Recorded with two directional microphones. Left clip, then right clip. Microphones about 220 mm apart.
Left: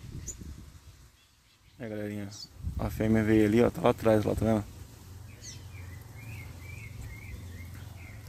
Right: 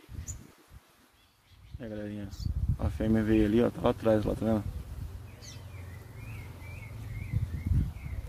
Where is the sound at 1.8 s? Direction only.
20° left (ahead or behind).